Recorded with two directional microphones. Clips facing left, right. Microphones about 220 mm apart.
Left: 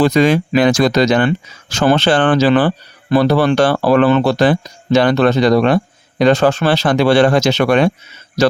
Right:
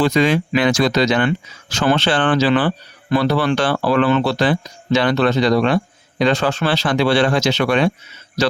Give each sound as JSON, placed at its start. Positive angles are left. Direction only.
{"t": 0.0, "sound": "speech", "side_deg": 45}